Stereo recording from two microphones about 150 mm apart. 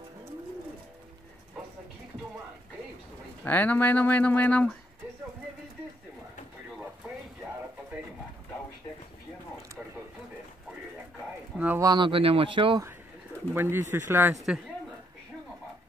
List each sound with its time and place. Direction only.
3.4 s speech: 10° left (ahead or behind)
11.5 s a sound: 10° right (ahead or behind)
11.8 s speech: 30° right (ahead or behind)
13.5 s speech: 15° right (ahead or behind)